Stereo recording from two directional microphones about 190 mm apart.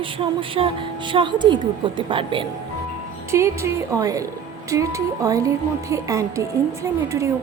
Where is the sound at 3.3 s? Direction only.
15° right (ahead or behind).